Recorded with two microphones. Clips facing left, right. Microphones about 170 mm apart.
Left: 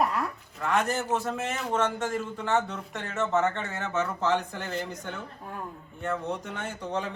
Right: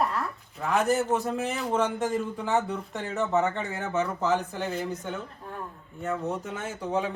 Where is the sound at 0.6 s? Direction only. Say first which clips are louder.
Right 3 dB; centre (ahead or behind).